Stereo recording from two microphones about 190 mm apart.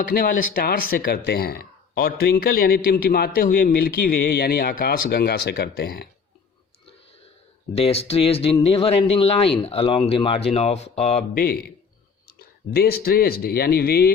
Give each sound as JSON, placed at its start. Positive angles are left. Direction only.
{"t": 0.0, "sound": "speech", "side_deg": 45}
{"t": 7.8, "sound": "speech", "side_deg": 30}
{"t": 11.3, "sound": "a man's voice", "side_deg": 55}
{"t": 12.7, "sound": "speech", "side_deg": 55}